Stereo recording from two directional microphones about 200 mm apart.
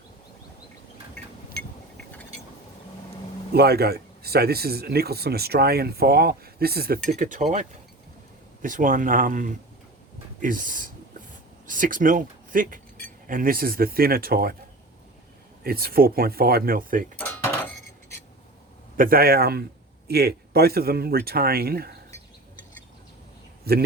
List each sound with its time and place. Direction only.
1.2 s a sound: 5° left (ahead or behind)
3.5 s speech: 50° right (ahead or behind)
7.1 s speech: 40° right (ahead or behind)
15.6 s speech: 50° right (ahead or behind)
18.9 s speech: 45° right (ahead or behind)
23.7 s speech: 50° right (ahead or behind)